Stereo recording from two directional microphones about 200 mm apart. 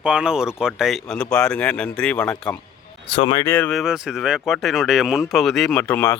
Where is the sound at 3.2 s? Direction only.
25° left (ahead or behind).